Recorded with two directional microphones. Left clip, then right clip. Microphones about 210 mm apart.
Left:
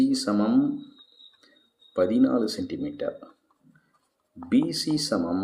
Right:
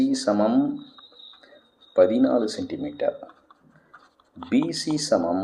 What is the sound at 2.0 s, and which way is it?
Speech, 55° left (ahead or behind).